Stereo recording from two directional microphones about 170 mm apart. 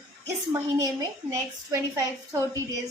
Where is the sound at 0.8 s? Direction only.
20° right (ahead or behind).